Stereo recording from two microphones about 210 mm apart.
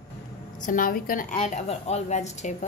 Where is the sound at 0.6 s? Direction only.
40° left (ahead or behind).